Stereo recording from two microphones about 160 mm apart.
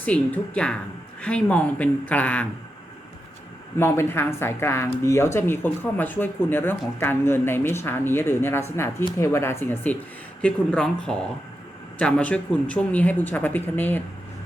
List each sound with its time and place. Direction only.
0.0 s speech: 10° left (ahead or behind)
3.8 s speech: 15° left (ahead or behind)